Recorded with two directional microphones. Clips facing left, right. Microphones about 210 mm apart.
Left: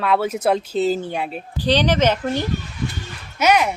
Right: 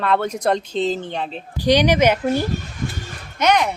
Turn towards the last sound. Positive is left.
turn(degrees=5)  # may be behind; listen again after turning